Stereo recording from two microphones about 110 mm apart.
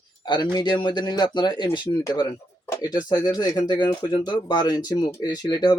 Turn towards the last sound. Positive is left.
turn(degrees=40)  # may be behind; listen again after turning